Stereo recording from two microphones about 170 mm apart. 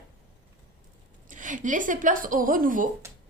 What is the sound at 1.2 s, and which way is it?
Speech, 50° right (ahead or behind).